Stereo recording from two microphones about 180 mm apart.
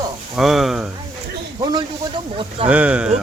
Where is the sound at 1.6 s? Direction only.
25° right (ahead or behind).